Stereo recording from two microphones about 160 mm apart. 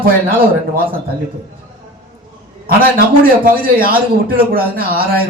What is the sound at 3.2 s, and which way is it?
Speech, 65° right (ahead or behind).